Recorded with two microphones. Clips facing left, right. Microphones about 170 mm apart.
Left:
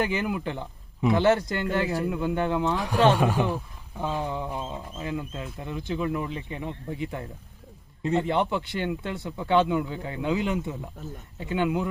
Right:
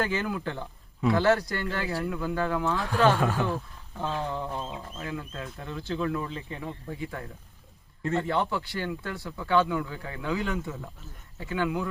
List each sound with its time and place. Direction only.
0.0 s speech: 15° left (ahead or behind)